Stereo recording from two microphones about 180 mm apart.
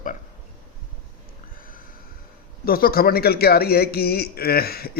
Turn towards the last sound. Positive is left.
turn(degrees=60)  # may be behind; listen again after turning